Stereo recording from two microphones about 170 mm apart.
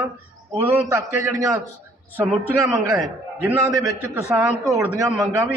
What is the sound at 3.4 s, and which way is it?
A man's voice, 15° right (ahead or behind).